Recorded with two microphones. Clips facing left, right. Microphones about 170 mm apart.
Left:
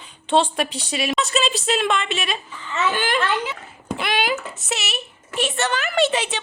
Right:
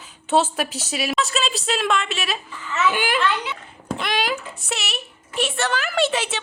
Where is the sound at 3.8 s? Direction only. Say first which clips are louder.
Left 1 dB; 5° left (ahead or behind).